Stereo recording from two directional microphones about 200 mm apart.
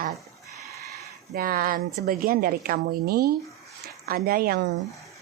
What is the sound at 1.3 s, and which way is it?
Speech, 45° right (ahead or behind).